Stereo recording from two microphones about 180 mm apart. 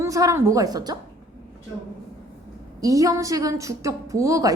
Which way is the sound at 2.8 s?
20° right (ahead or behind).